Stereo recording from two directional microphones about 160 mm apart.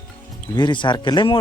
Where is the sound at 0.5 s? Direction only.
30° left (ahead or behind).